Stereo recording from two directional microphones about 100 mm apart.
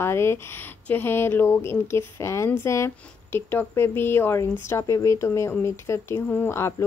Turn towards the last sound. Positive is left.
turn(degrees=25)  # may be behind; listen again after turning